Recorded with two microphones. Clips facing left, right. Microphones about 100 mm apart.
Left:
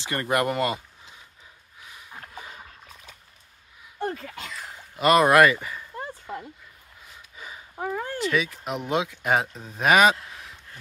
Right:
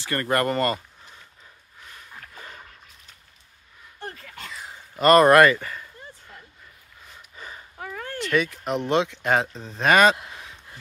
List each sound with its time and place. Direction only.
0.0 s speech: 15° left (ahead or behind)
1.8 s a sound: 10° left (ahead or behind)
2.3 s dog: 10° left (ahead or behind)
4.9 s speech: 5° left (ahead or behind)
5.9 s dog: 90° left
7.1 s gasp: 5° left (ahead or behind)
7.7 s a sound: 20° left (ahead or behind)
8.1 s speech: 5° left (ahead or behind)